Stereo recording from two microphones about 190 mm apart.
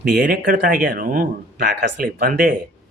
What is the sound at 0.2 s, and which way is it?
Speech, 50° right (ahead or behind).